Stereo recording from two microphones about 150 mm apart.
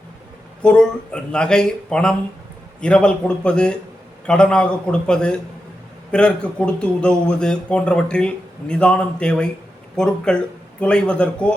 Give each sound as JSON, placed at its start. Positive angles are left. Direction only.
{"t": 0.6, "sound": "a man's voice", "side_deg": 5}